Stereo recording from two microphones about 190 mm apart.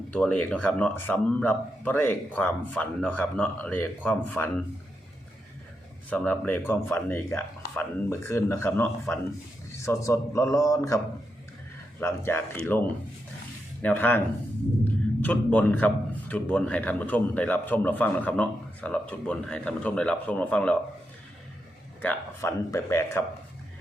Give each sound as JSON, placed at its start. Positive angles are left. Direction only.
{"t": 0.1, "sound": "a man's voice", "side_deg": 5}
{"t": 6.1, "sound": "a man's voice", "side_deg": 10}
{"t": 15.2, "sound": "a man's voice", "side_deg": 5}
{"t": 22.0, "sound": "a man's voice", "side_deg": 15}